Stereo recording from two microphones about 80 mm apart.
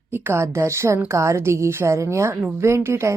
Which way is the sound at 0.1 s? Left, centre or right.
Right.